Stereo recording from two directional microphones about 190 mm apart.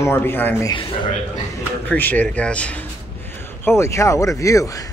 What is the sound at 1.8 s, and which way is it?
Speech, 10° left (ahead or behind).